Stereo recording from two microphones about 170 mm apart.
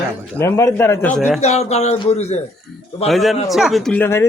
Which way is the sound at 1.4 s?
40° left (ahead or behind).